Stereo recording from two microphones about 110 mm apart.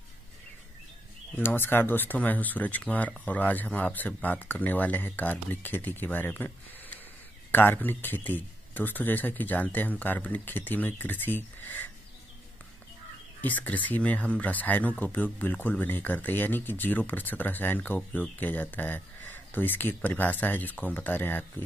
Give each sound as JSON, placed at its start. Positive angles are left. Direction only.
{"t": 1.3, "sound": "speech", "side_deg": 20}
{"t": 13.4, "sound": "speech", "side_deg": 15}